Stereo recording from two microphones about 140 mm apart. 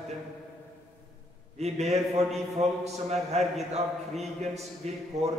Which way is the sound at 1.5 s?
50° right (ahead or behind).